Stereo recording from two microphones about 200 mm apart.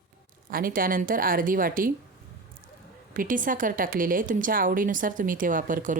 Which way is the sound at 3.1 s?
40° right (ahead or behind).